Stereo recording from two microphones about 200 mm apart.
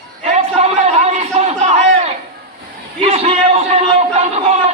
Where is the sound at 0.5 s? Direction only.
30° right (ahead or behind).